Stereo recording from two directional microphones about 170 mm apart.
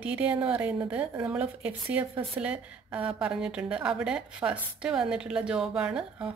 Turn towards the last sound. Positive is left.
turn(degrees=-5)  # may be behind; listen again after turning